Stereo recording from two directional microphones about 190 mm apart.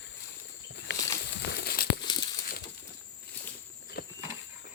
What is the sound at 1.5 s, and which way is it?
Crumpling, 60° left (ahead or behind).